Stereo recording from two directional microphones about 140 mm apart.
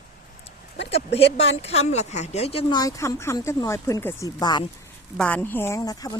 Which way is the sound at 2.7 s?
25° left (ahead or behind).